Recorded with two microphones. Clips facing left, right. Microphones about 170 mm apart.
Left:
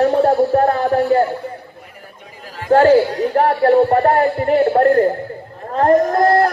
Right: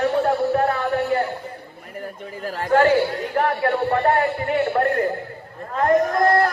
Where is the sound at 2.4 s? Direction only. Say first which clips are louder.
Right 5 dB; 45° right (ahead or behind).